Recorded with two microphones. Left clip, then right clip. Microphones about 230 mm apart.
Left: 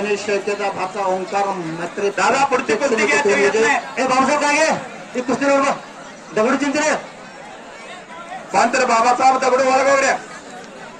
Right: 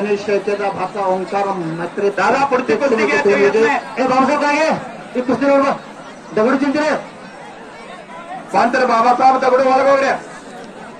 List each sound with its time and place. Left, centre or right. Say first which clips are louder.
0.0 s speech: right 3 dB; left
8.5 s speech: right 2 dB; left